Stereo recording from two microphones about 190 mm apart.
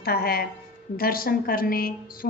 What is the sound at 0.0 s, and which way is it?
A woman's voice, 55° left (ahead or behind).